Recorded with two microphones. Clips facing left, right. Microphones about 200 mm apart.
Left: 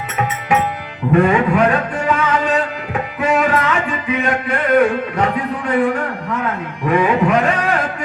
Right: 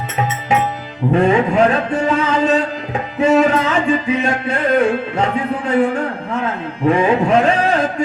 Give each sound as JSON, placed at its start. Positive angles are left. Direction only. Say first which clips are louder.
{"t": 1.3, "sound": "music", "louder": "right 1 dB", "side_deg": -25}